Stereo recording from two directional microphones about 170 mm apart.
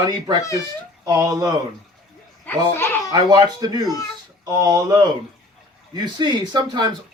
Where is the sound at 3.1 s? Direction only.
25° right (ahead or behind).